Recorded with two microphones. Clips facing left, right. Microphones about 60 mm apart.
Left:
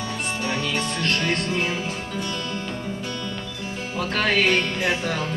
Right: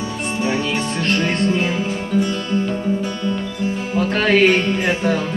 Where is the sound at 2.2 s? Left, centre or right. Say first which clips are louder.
Right 8 dB; right.